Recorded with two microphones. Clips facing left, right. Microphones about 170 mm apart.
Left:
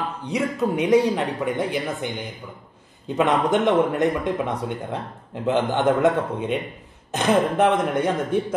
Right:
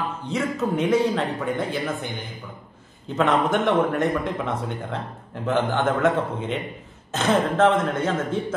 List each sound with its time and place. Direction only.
0.3 s a man's voice: 15° left (ahead or behind)